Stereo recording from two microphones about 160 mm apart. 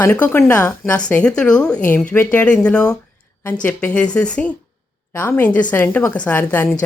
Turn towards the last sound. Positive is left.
turn(degrees=10)  # may be behind; listen again after turning